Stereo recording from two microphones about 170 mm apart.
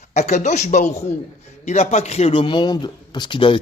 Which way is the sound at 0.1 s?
40° left (ahead or behind).